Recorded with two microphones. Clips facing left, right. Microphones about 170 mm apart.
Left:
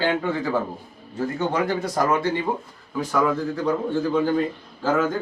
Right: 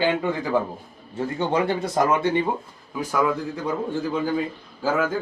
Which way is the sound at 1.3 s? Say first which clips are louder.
Right 1 dB; 30° right (ahead or behind).